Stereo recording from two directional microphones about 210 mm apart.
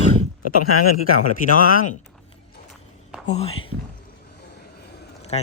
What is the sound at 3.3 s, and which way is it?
Speech, 30° left (ahead or behind).